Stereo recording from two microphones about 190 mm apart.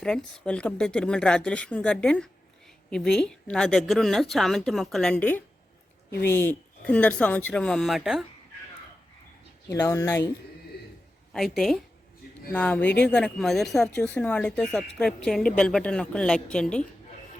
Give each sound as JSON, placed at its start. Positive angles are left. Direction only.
{"t": 0.0, "sound": "speech", "side_deg": 5}
{"t": 9.6, "sound": "speech", "side_deg": 15}
{"t": 11.3, "sound": "speech", "side_deg": 0}